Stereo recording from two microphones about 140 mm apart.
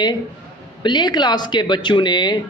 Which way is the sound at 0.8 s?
30° left (ahead or behind).